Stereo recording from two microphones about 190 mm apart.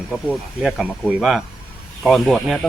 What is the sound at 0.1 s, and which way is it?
Speech, centre (ahead or behind).